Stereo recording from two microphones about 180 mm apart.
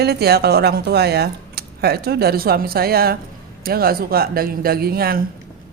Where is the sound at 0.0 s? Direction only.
60° right (ahead or behind).